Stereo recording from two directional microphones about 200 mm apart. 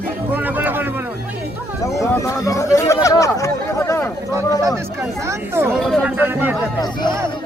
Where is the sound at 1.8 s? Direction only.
15° left (ahead or behind).